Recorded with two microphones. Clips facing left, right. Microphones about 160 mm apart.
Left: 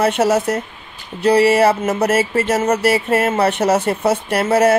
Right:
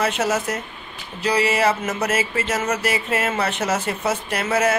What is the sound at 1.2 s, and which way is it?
Speech, 55° left (ahead or behind).